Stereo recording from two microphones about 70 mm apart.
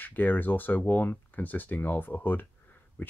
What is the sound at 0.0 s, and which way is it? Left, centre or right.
Speech, left.